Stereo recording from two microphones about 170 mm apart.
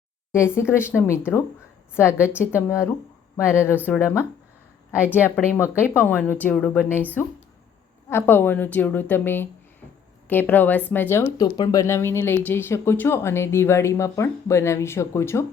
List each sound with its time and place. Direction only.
0.3 s speech: 15° left (ahead or behind)
5.1 s speech: 15° left (ahead or behind)
8.1 s speech: 10° left (ahead or behind)
11.3 s speech: 25° left (ahead or behind)